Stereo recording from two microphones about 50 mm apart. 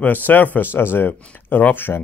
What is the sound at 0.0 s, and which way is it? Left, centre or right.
Speech, left.